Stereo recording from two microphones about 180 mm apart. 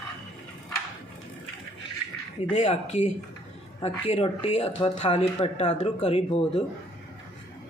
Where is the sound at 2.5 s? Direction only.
40° left (ahead or behind).